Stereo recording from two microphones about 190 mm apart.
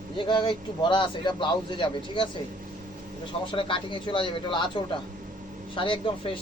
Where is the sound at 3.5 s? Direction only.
25° left (ahead or behind).